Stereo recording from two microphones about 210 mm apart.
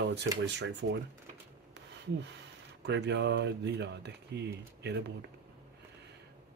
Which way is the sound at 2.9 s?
55° right (ahead or behind).